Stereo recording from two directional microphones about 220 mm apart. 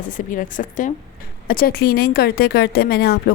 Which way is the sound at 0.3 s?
35° left (ahead or behind).